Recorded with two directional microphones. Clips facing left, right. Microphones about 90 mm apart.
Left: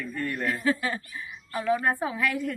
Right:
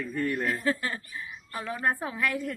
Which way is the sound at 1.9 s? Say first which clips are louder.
Left 2 dB; centre (ahead or behind).